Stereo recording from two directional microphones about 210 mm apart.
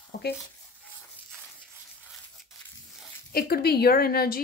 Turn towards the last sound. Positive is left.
turn(degrees=45)  # may be behind; listen again after turning